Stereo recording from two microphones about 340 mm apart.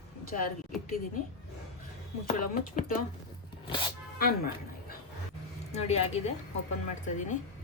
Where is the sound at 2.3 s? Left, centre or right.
Left.